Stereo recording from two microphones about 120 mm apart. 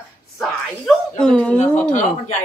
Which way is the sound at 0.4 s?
5° left (ahead or behind).